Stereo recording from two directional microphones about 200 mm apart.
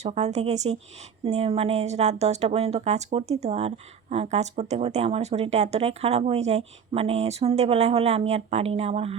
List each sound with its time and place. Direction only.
0.0 s speech: 35° right (ahead or behind)